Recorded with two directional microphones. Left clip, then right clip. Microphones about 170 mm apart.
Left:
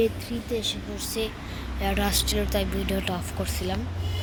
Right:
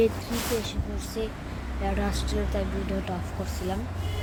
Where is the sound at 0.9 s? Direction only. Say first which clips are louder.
Left 3 dB; 10° left (ahead or behind).